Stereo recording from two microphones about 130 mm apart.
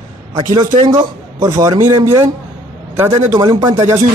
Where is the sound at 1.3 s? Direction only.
25° right (ahead or behind).